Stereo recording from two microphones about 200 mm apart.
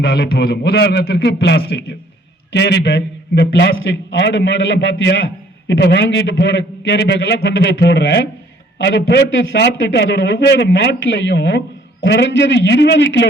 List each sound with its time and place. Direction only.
0.0 s a man's voice: 50° left (ahead or behind)